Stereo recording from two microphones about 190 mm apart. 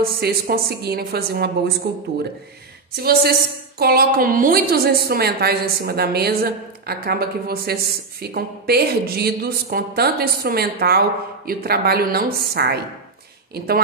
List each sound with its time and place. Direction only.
0.2 s a woman's voice: 55° right (ahead or behind)
3.0 s a woman's voice: 55° right (ahead or behind)